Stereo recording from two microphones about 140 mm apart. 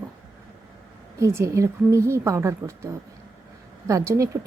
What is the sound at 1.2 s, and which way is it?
A woman's voice, 20° right (ahead or behind).